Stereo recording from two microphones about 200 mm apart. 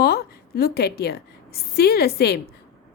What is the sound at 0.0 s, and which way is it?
A woman's voice, 50° left (ahead or behind).